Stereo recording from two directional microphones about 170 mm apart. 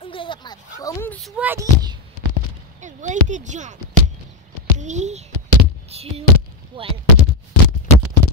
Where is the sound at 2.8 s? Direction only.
45° right (ahead or behind).